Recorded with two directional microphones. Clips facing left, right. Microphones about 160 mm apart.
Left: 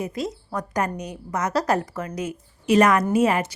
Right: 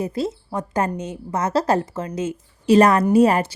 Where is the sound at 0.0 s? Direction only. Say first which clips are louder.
Right 4 dB; 30° right (ahead or behind).